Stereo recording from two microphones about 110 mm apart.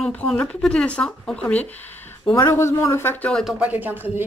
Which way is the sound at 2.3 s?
25° left (ahead or behind).